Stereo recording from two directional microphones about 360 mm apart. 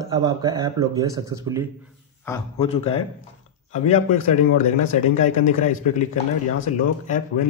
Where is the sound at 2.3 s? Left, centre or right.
Centre.